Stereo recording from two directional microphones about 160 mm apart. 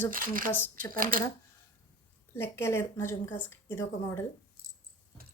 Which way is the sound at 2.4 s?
15° left (ahead or behind).